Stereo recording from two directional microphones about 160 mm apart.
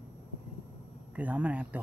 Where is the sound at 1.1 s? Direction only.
10° right (ahead or behind).